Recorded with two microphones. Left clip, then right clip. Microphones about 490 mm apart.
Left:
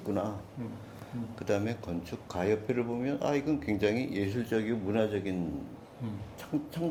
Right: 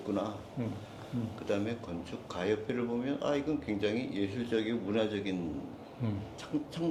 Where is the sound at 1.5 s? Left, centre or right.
Left.